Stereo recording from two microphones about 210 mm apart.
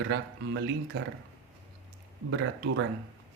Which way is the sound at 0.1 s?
65° right (ahead or behind).